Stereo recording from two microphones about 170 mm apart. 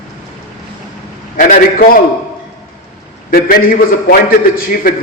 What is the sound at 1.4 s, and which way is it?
Speech, 50° left (ahead or behind).